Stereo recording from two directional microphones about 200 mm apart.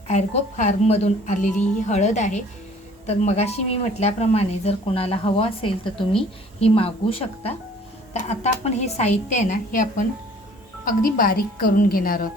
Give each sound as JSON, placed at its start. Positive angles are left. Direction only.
{"t": 0.1, "sound": "speech", "side_deg": 35}
{"t": 10.8, "sound": "speech", "side_deg": 45}